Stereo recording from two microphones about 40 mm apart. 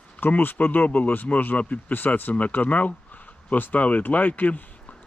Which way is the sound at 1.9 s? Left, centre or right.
Left.